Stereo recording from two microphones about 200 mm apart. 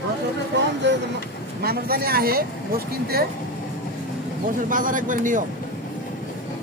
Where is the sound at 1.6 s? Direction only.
50° right (ahead or behind).